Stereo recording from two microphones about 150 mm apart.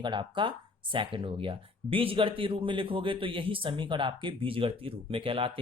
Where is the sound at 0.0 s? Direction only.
30° right (ahead or behind).